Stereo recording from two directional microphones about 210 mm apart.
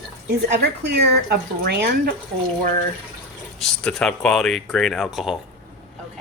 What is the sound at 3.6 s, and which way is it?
Speech, 5° left (ahead or behind).